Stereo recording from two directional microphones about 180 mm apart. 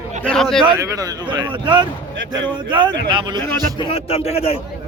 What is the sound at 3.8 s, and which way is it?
Speech, 30° left (ahead or behind).